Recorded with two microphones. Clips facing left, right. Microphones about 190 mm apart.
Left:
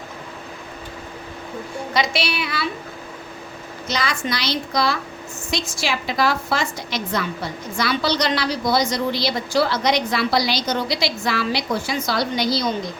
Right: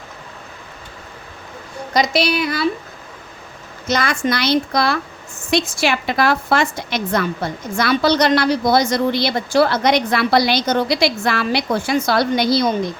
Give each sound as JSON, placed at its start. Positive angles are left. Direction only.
{"t": 1.9, "sound": "a woman's voice", "side_deg": -40}
{"t": 3.8, "sound": "a woman's voice", "side_deg": -50}